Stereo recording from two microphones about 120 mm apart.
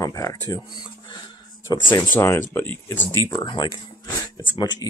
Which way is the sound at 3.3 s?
40° left (ahead or behind).